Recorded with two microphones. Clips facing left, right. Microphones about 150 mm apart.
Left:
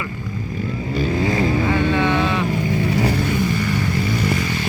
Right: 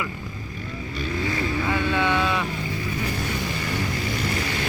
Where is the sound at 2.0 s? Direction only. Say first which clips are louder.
Left 4 dB; 20° left (ahead or behind).